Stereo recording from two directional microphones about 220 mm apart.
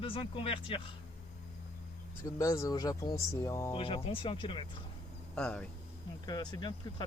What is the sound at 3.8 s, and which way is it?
Speech, 25° left (ahead or behind).